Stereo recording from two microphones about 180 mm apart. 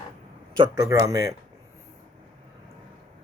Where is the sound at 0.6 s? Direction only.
20° right (ahead or behind).